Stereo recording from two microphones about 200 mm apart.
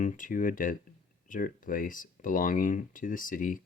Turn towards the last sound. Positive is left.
turn(degrees=40)  # may be behind; listen again after turning